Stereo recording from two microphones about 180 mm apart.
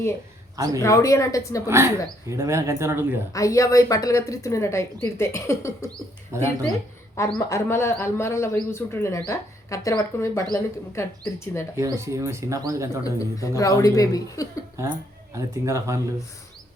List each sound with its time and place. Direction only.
0.5 s a man's voice: 20° right (ahead or behind)
0.8 s speech: 15° left (ahead or behind)
1.6 s speech: 15° right (ahead or behind)
3.3 s speech: 20° left (ahead or behind)
5.9 s speech: 15° right (ahead or behind)
7.3 s speech: 15° left (ahead or behind)
11.8 s speech: 15° right (ahead or behind)
13.1 s a woman's voice: 20° left (ahead or behind)
15.4 s speech: 15° right (ahead or behind)